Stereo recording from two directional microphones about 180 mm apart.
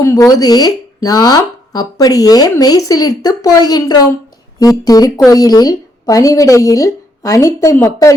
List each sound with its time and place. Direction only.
0.0 s a woman's voice: 15° left (ahead or behind)